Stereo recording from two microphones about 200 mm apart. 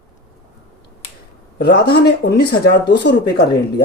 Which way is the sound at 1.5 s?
55° left (ahead or behind).